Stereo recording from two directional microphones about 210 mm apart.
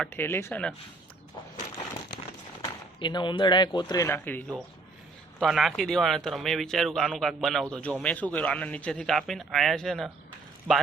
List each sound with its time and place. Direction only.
0.0 s speech: 10° left (ahead or behind)
2.6 s speech: 20° left (ahead or behind); by 10.1 s centre (ahead or behind)